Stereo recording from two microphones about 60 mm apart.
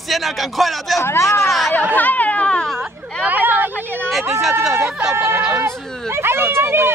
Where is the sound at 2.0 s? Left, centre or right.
Left.